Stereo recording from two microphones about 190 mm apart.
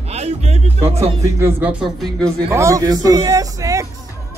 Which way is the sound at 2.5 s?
15° right (ahead or behind).